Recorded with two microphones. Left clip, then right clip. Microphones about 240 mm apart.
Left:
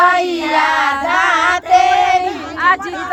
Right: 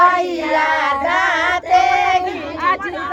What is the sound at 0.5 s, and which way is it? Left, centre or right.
Child singing, left.